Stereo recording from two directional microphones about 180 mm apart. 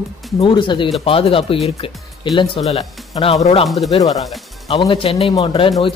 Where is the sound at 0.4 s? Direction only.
25° left (ahead or behind).